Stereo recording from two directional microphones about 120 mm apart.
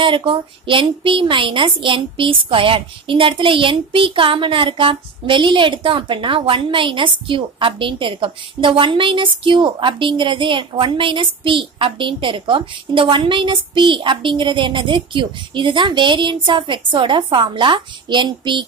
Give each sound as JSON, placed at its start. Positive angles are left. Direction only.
{"t": 0.0, "sound": "a woman's voice", "side_deg": -45}